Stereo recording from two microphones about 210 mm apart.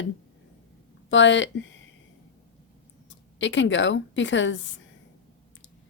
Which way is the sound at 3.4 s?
60° left (ahead or behind).